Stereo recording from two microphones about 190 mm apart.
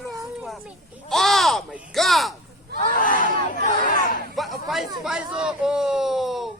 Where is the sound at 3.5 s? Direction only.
45° left (ahead or behind).